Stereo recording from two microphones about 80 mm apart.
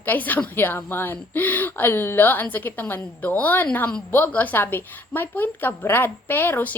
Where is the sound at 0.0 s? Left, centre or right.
Left.